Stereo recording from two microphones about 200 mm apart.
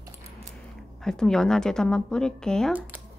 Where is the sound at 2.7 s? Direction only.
10° right (ahead or behind).